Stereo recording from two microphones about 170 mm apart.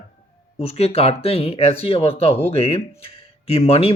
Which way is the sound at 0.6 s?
35° left (ahead or behind).